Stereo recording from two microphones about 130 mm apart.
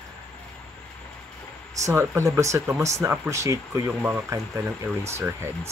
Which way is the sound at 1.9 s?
20° right (ahead or behind).